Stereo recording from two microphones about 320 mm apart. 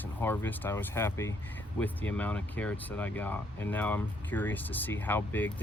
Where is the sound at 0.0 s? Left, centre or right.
Centre.